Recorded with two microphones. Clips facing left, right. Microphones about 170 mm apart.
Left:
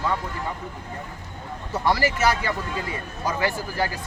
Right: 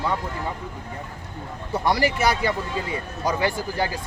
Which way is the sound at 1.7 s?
15° right (ahead or behind).